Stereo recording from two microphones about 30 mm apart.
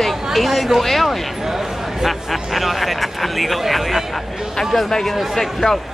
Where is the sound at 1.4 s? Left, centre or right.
Centre.